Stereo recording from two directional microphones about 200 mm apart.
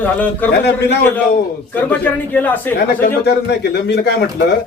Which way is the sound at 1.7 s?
10° left (ahead or behind).